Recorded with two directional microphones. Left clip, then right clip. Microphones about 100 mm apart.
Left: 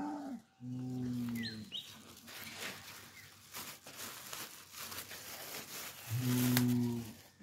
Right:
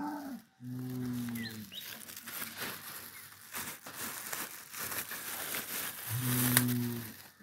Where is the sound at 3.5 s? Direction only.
90° right.